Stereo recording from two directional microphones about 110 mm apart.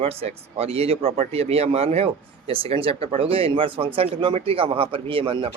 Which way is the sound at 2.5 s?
55° right (ahead or behind).